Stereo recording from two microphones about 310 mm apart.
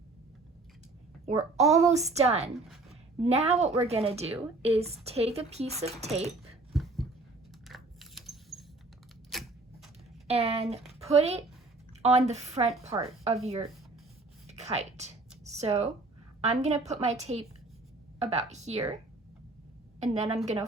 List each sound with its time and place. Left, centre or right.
1.2 s a child's voice: centre
1.5 s a woman's voice: right
2.9 s a sound: centre
3.8 s a woman's voice: centre
6.7 s a sound: centre
10.2 s a woman's voice: centre
14.4 s a sound: right
16.4 s a woman's voice: right
20.3 s a woman's voice: right